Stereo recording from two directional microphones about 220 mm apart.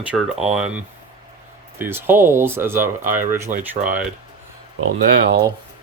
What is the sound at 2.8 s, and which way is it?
Speech, 35° right (ahead or behind).